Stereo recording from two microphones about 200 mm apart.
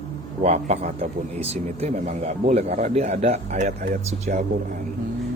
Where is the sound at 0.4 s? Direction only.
35° right (ahead or behind).